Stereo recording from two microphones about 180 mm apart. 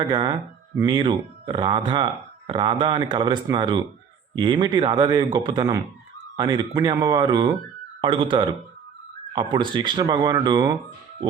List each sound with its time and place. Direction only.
0.1 s speech: 25° right (ahead or behind)